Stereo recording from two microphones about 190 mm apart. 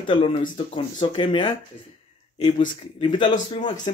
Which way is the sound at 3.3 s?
40° left (ahead or behind).